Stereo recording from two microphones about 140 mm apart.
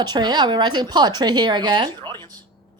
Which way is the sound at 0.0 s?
30° right (ahead or behind).